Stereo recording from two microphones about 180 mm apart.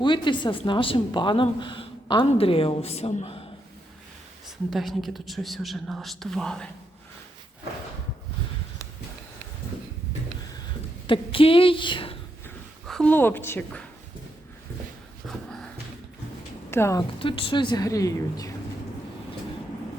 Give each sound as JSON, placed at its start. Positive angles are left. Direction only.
{"t": 0.0, "sound": "a woman's voice", "side_deg": 25}
{"t": 4.7, "sound": "speech", "side_deg": 0}
{"t": 11.0, "sound": "a woman's voice", "side_deg": 30}
{"t": 12.9, "sound": "a woman's voice", "side_deg": 5}
{"t": 15.3, "sound": "a sound", "side_deg": 5}
{"t": 16.6, "sound": "a woman's voice", "side_deg": 15}
{"t": 17.2, "sound": "a woman's voice", "side_deg": 30}